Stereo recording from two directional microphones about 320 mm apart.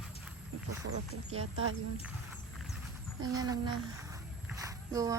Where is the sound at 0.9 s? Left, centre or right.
Right.